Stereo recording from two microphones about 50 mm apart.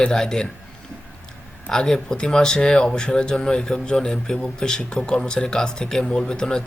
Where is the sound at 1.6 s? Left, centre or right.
Centre.